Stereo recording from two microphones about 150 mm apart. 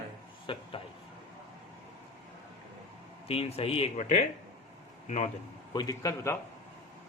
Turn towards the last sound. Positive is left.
turn(degrees=20)  # may be behind; listen again after turning